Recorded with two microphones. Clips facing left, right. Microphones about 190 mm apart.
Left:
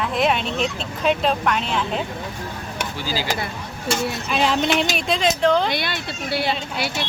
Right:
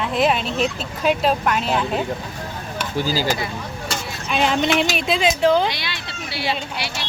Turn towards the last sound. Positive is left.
turn(degrees=50)  # may be behind; listen again after turning